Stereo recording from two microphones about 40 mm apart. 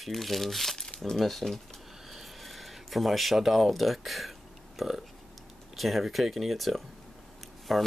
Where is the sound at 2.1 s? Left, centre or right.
Centre.